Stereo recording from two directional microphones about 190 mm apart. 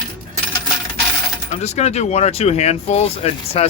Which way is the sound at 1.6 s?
35° left (ahead or behind).